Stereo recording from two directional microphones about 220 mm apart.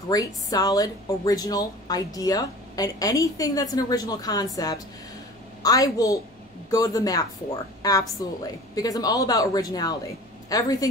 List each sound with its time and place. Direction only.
0.1 s a woman's voice: 15° left (ahead or behind)
5.6 s a woman's voice: 15° left (ahead or behind)